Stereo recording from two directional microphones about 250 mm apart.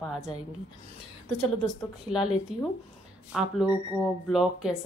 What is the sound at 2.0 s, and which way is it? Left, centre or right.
A woman's voice, centre.